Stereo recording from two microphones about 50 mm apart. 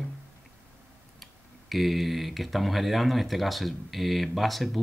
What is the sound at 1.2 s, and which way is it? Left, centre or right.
Speech, centre.